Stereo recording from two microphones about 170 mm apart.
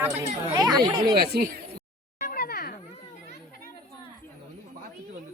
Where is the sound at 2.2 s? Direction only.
60° left (ahead or behind).